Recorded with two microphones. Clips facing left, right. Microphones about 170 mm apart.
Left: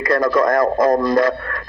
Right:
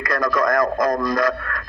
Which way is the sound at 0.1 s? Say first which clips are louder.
Left 4 dB; 30° left (ahead or behind).